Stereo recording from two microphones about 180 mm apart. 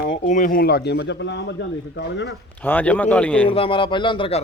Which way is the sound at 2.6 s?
10° left (ahead or behind).